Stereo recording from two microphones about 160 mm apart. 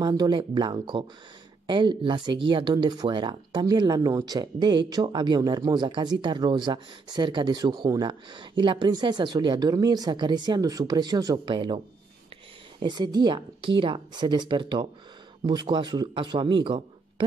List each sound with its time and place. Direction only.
0.0 s speech: 25° right (ahead or behind)
12.8 s speech: 25° right (ahead or behind)